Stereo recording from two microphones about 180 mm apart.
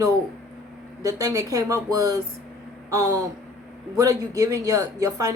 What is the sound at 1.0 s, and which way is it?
A woman's voice, 20° right (ahead or behind).